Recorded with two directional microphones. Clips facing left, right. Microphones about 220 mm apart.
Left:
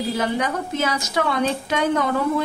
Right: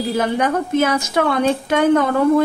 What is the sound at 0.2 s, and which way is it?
A woman's voice, 55° right (ahead or behind).